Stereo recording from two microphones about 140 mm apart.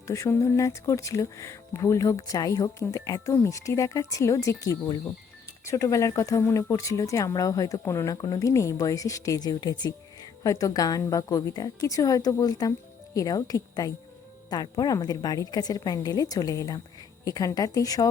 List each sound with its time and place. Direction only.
0.1 s speech: 20° left (ahead or behind)